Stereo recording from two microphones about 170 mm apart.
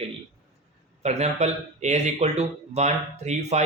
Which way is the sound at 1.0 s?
40° right (ahead or behind).